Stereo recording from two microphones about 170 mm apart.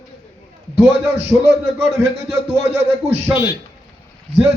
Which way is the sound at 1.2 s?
35° right (ahead or behind).